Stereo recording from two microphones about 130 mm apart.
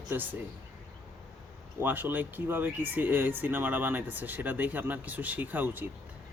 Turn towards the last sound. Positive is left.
turn(degrees=-15)  # may be behind; listen again after turning